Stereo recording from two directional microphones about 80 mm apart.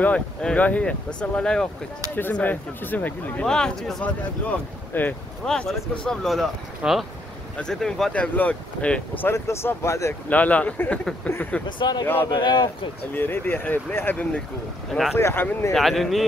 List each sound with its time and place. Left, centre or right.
0.0 s speech: centre
2.3 s speech: left
3.4 s speech: centre
4.9 s speech: left
5.4 s speech: centre
7.5 s speech: centre
8.1 s speech: centre
9.2 s speech: left
10.3 s speech: centre
11.6 s speech: left
13.1 s speech: left
14.9 s speech: centre
15.1 s speech: left
15.7 s speech: centre